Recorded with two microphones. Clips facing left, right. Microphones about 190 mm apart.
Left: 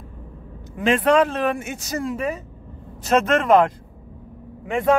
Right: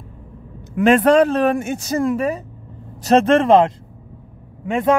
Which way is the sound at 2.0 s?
50° right (ahead or behind).